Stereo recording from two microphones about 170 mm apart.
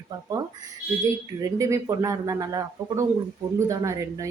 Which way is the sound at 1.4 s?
20° right (ahead or behind).